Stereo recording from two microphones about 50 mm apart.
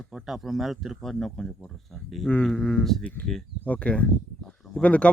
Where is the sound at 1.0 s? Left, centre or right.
Centre.